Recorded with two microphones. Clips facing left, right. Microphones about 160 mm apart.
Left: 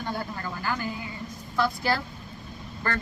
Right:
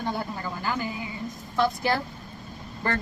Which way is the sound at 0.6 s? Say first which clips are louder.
Right 1 dB; 15° right (ahead or behind).